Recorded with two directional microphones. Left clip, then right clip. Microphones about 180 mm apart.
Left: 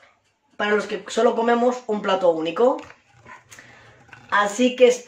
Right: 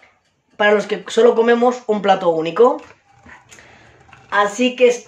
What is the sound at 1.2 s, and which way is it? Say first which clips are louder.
Speech: right 6 dB; 40° right (ahead or behind).